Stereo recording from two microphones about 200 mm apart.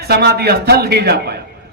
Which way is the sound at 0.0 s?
55° right (ahead or behind).